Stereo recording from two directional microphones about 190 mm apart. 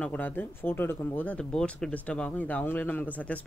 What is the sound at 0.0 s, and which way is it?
Speech, 10° left (ahead or behind).